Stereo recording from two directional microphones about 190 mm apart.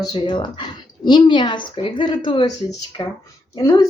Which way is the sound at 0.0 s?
25° left (ahead or behind).